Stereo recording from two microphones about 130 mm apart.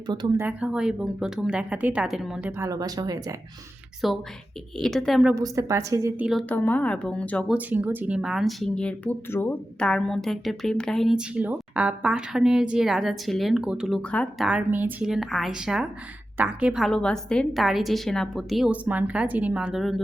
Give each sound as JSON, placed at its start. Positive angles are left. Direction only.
{"t": 0.3, "sound": "speech", "side_deg": -10}
{"t": 2.6, "sound": "a woman's voice", "side_deg": -25}
{"t": 4.0, "sound": "speech", "side_deg": 0}
{"t": 5.3, "sound": "a woman's voice", "side_deg": -25}
{"t": 6.5, "sound": "speech", "side_deg": 10}
{"t": 7.4, "sound": "speech", "side_deg": -10}
{"t": 9.8, "sound": "speech", "side_deg": 5}
{"t": 18.7, "sound": "speech", "side_deg": -10}